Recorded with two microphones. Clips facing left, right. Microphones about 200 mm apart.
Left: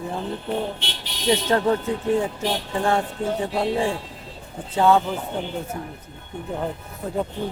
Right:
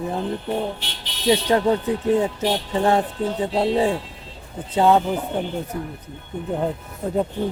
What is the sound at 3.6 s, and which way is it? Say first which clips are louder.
Speech: right 6 dB; 20° right (ahead or behind).